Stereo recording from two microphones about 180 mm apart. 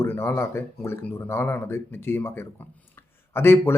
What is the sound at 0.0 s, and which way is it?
Speech, 15° left (ahead or behind).